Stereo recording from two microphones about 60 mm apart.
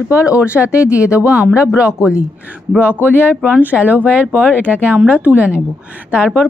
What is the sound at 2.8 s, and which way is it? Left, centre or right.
Speech, right.